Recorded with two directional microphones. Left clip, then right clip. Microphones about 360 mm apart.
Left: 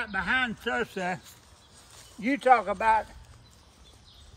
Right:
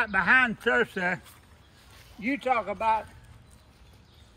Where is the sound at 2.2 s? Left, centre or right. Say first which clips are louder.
Left 5 dB; left.